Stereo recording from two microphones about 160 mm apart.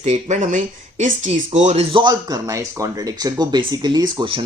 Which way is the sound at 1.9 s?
25° right (ahead or behind).